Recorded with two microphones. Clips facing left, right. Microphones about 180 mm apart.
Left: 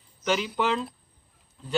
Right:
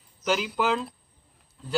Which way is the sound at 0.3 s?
5° right (ahead or behind).